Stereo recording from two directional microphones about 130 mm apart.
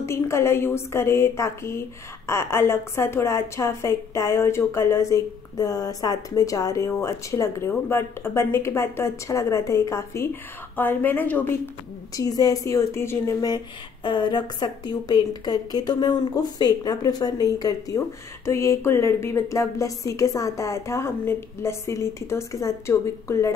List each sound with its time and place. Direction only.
0.0 s a woman's voice: 20° left (ahead or behind)
12.2 s a woman's voice: 30° left (ahead or behind)